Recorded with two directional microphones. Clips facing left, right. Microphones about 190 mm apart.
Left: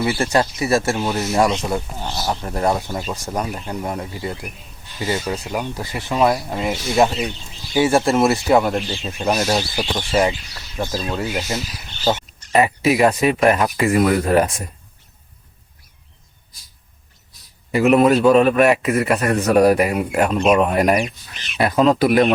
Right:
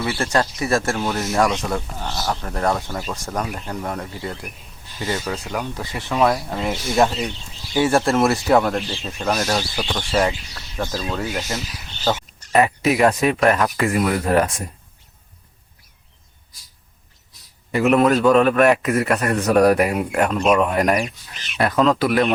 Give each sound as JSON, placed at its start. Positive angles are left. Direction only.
{"t": 0.0, "sound": "speech", "side_deg": 15}
{"t": 1.4, "sound": "speech", "side_deg": 20}
{"t": 1.6, "sound": "speech", "side_deg": 5}
{"t": 5.6, "sound": "speech", "side_deg": 5}
{"t": 17.7, "sound": "speech", "side_deg": 10}